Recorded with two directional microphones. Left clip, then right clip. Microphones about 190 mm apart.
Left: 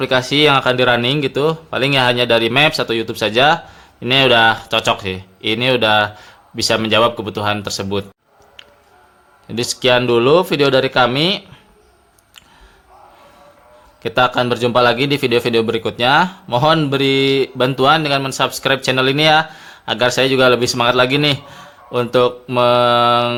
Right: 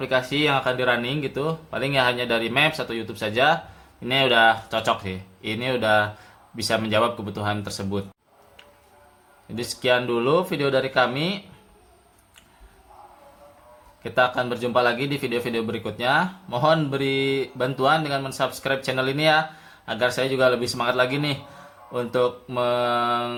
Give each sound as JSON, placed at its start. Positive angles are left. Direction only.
{"t": 0.0, "sound": "speech", "side_deg": 45}
{"t": 9.6, "sound": "speech", "side_deg": 45}
{"t": 14.0, "sound": "speech", "side_deg": 45}